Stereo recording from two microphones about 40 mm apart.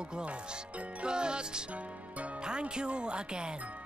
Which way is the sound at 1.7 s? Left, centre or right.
Right.